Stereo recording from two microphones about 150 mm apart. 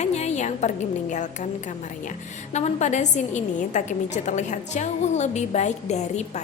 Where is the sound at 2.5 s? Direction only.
50° left (ahead or behind).